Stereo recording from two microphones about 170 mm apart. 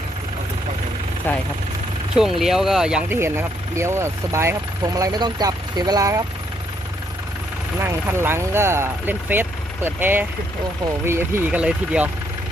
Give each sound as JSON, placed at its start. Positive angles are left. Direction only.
{"t": 1.3, "sound": "speech", "side_deg": 10}
{"t": 2.4, "sound": "speech", "side_deg": 0}
{"t": 7.8, "sound": "speech", "side_deg": -15}